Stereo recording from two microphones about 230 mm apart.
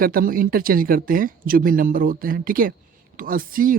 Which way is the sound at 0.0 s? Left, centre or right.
Right.